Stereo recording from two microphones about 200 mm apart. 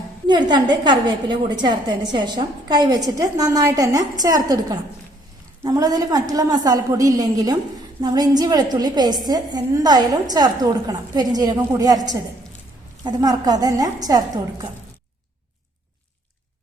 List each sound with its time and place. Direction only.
0.3 s a woman's voice: 20° right (ahead or behind)